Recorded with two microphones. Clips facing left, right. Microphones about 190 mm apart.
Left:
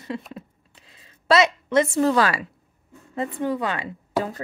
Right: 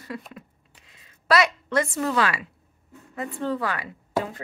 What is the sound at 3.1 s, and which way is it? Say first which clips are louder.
Speech: left 5 dB; 25° left (ahead or behind).